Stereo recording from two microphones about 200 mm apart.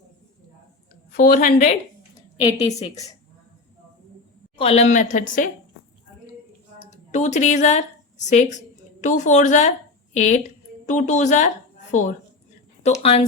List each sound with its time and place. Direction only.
1.1 s a woman's voice: 45° left (ahead or behind)
2.6 s a woman's voice: 15° left (ahead or behind)
4.5 s a woman's voice: 30° left (ahead or behind)
6.9 s a woman's voice: 35° left (ahead or behind)